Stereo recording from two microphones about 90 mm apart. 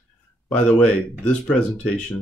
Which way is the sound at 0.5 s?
10° left (ahead or behind).